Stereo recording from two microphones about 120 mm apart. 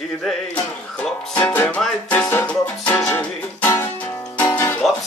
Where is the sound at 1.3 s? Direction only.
15° left (ahead or behind).